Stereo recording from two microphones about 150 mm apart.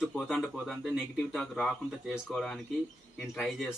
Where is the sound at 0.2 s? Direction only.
Centre (ahead or behind).